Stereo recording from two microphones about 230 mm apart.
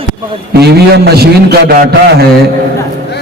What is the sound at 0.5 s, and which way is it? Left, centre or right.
A man's voice, right.